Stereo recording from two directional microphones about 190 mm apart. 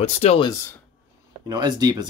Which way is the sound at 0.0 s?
35° left (ahead or behind).